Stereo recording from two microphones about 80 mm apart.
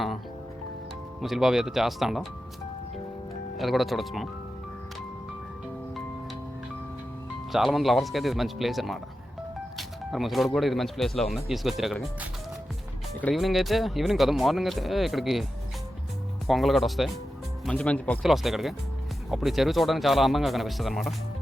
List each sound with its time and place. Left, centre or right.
1.2 s speech: centre
3.6 s speech: centre
7.5 s speech: centre
13.3 s speech: centre
16.5 s speech: centre
17.7 s speech: centre
18.2 s speech: centre